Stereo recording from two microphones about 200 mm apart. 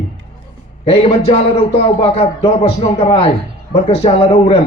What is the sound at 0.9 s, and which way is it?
Speech, 30° left (ahead or behind).